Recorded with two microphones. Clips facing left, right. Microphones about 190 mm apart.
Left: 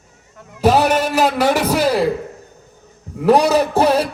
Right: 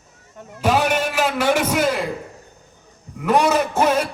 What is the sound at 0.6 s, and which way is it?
Music, 40° left (ahead or behind).